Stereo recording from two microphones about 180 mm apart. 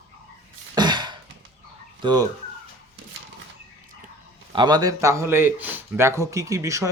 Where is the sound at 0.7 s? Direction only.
25° right (ahead or behind).